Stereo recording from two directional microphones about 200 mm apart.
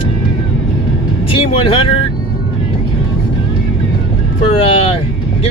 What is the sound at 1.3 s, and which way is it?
Speech, 25° left (ahead or behind).